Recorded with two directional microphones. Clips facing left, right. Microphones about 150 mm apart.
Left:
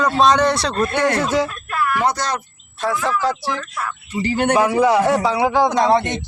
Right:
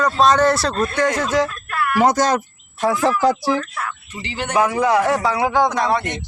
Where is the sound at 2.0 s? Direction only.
45° right (ahead or behind).